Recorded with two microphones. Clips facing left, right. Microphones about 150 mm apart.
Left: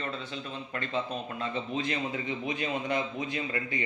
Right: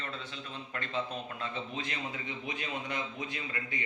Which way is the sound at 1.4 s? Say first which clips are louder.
Left 8 dB; 30° left (ahead or behind).